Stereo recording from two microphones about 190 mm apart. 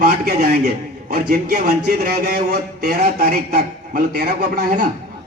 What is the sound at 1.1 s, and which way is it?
Speech, 45° right (ahead or behind).